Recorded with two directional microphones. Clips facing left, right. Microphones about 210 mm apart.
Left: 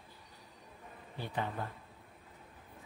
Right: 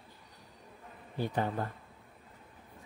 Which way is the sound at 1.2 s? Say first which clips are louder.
Right 6 dB; 40° right (ahead or behind).